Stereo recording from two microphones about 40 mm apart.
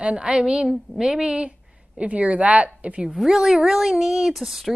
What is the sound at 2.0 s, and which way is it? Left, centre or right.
Speech, right.